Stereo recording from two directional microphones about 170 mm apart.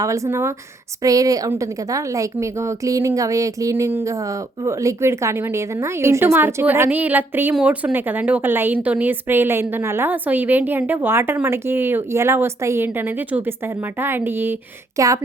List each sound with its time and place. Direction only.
0.0 s a woman's voice: 15° right (ahead or behind)